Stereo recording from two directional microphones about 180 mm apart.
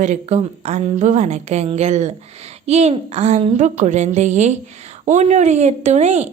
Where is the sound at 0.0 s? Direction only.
40° right (ahead or behind).